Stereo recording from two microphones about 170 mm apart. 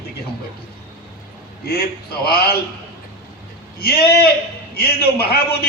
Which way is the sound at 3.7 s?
70° left (ahead or behind).